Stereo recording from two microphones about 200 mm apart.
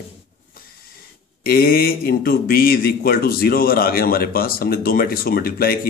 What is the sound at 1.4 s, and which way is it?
Speech, 50° left (ahead or behind).